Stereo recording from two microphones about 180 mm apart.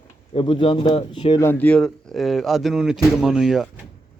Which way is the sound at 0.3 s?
30° left (ahead or behind).